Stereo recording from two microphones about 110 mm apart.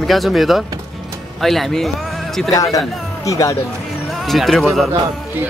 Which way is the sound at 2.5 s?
30° left (ahead or behind).